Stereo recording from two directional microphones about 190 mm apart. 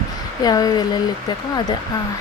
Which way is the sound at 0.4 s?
20° left (ahead or behind).